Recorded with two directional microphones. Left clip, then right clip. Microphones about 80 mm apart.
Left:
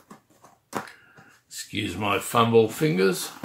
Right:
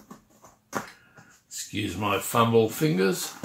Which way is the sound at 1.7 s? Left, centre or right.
Centre.